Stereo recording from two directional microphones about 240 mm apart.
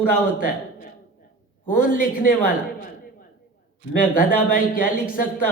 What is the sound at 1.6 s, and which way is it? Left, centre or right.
Speech, left.